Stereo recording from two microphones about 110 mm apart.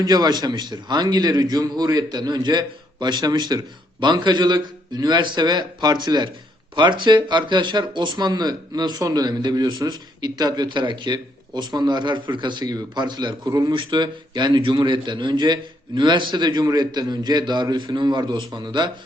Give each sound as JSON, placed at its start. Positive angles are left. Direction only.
{"t": 0.0, "sound": "a man's voice", "side_deg": -40}
{"t": 13.7, "sound": "a man's voice", "side_deg": -45}